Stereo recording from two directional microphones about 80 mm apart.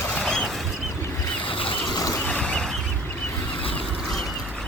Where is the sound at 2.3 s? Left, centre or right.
Centre.